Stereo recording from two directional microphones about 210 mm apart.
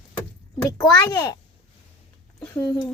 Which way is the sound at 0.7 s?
15° left (ahead or behind).